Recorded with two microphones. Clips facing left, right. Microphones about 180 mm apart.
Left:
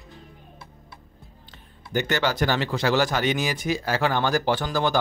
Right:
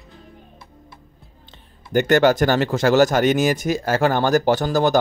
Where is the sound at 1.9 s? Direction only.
50° right (ahead or behind).